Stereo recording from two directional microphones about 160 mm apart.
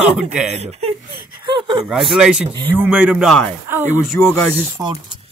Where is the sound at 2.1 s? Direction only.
5° right (ahead or behind).